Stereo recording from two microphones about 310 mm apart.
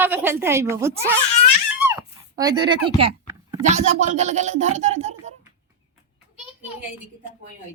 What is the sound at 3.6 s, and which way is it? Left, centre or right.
Speech, right.